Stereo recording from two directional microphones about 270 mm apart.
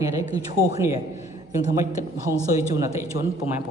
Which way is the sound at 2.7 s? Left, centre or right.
Centre.